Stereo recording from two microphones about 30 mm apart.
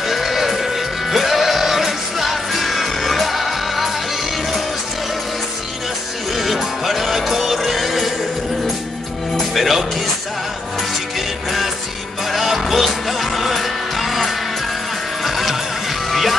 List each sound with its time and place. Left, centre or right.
0.0 s music: centre
6.3 s music: centre
9.3 s music: centre
11.1 s music: centre